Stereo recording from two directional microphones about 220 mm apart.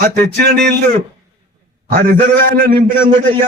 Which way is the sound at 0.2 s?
45° right (ahead or behind).